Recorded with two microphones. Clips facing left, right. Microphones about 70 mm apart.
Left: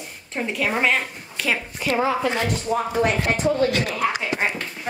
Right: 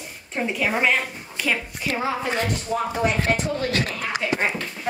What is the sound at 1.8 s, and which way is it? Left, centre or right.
Speech, left.